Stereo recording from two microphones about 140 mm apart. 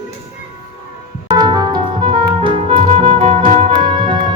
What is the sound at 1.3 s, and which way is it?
Music, 30° right (ahead or behind).